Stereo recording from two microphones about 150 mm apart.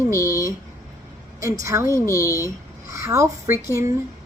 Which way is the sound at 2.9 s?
20° right (ahead or behind).